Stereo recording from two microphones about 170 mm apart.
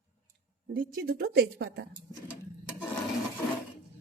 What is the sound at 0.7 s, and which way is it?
A woman's voice, 60° right (ahead or behind).